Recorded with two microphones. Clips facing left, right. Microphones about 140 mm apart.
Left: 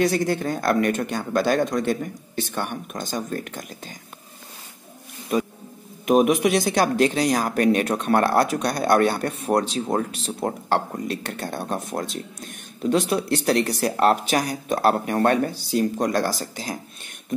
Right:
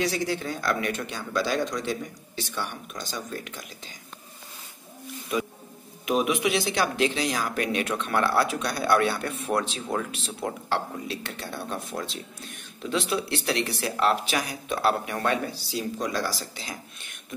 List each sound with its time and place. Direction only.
0.0 s a woman's voice: 50° left (ahead or behind)
5.3 s a woman's voice: 40° left (ahead or behind)